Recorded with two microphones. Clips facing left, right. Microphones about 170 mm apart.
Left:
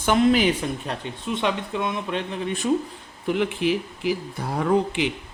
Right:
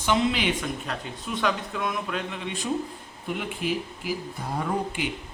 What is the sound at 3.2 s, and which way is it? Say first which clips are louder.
Speech: left 7 dB; 90° left.